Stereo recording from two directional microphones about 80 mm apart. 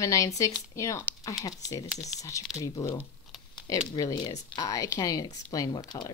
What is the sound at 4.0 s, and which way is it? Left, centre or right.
Speech, left.